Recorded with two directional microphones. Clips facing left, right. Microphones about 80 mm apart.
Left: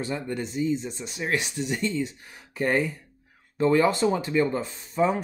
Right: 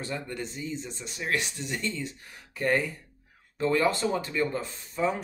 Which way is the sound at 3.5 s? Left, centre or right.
Left.